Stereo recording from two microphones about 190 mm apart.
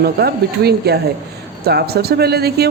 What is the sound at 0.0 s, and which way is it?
A woman's voice, 55° right (ahead or behind).